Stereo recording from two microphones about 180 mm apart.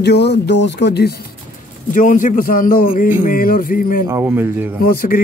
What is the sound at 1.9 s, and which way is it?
A man's voice, 45° left (ahead or behind).